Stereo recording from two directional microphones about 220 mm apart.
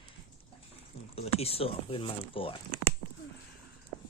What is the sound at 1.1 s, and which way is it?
Speech, 25° left (ahead or behind).